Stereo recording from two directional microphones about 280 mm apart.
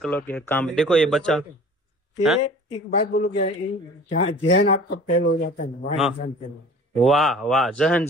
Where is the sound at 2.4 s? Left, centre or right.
Left.